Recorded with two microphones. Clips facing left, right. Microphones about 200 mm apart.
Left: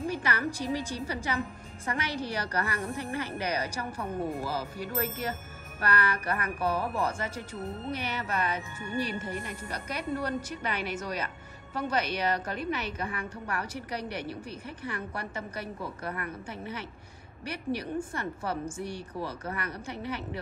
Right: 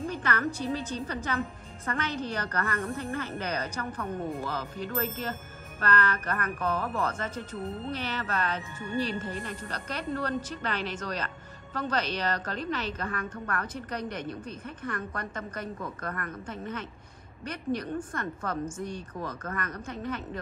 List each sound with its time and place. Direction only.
0.1 s a woman's voice: 10° left (ahead or behind)
18.8 s speech: 70° left (ahead or behind)
19.1 s a woman's voice: 10° left (ahead or behind)